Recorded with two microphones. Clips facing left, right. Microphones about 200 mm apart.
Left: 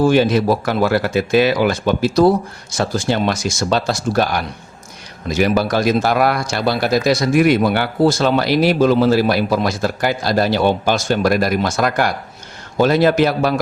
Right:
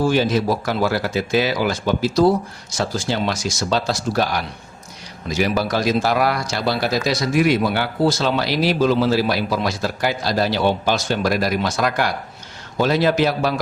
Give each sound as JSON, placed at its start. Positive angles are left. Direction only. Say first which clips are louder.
{"t": 0.0, "sound": "speech", "louder": "left 4 dB", "side_deg": 60}
{"t": 5.3, "sound": "speech", "louder": "left 4 dB", "side_deg": 55}